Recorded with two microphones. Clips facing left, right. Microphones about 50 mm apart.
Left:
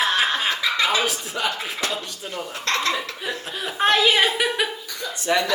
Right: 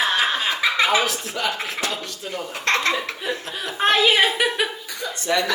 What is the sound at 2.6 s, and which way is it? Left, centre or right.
Speech, right.